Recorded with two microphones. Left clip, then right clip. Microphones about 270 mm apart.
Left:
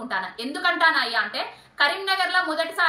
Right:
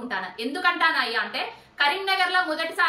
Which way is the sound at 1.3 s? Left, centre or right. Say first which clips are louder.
Even; centre.